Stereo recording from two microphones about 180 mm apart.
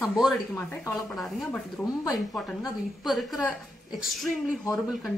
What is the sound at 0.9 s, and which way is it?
A woman's voice, 5° left (ahead or behind).